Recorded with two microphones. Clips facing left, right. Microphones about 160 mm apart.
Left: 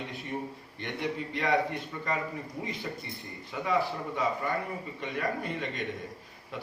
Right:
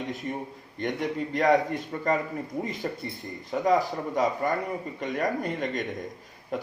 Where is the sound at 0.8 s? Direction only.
45° right (ahead or behind).